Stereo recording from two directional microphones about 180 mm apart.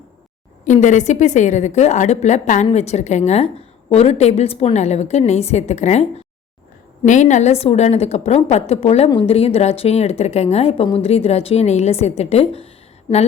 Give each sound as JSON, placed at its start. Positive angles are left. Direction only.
{"t": 0.6, "sound": "a woman's voice", "side_deg": 45}